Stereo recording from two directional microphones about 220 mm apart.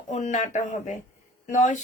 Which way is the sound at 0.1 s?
35° left (ahead or behind).